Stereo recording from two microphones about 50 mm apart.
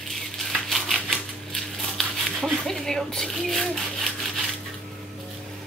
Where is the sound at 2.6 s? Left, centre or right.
Centre.